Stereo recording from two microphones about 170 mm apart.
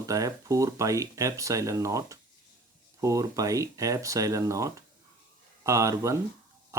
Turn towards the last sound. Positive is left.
turn(degrees=-15)  # may be behind; listen again after turning